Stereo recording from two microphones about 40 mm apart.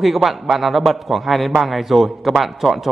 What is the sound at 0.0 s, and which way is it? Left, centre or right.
A man's voice, centre.